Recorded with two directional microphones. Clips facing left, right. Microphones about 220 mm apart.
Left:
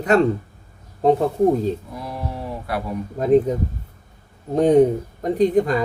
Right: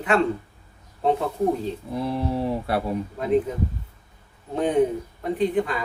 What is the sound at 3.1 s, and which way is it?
Speech, 40° left (ahead or behind).